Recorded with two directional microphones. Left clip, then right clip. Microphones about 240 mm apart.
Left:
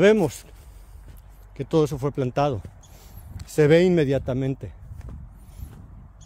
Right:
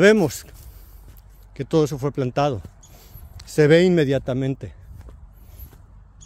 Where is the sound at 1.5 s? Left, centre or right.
Centre.